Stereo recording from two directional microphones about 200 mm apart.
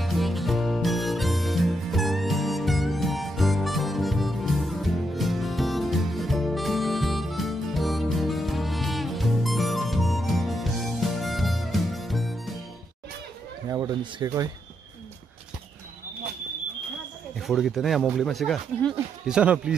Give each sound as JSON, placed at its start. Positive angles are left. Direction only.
{"t": 0.0, "sound": "music", "side_deg": 0}
{"t": 13.7, "sound": "a sound", "side_deg": -15}
{"t": 17.4, "sound": "speech", "side_deg": 0}